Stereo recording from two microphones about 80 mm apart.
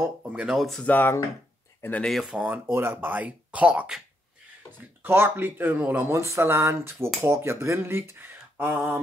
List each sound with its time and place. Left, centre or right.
0.3 s speech: centre
0.6 s speech: centre
0.8 s speech: left
2.0 s speech: centre
2.4 s speech: right
4.7 s speech: right